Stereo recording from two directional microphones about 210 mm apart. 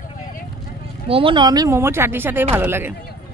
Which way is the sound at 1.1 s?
25° right (ahead or behind).